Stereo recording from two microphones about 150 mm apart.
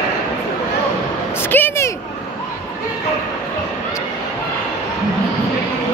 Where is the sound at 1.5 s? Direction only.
15° left (ahead or behind).